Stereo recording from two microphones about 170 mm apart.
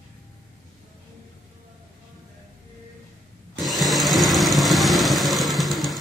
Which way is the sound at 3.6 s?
Centre (ahead or behind).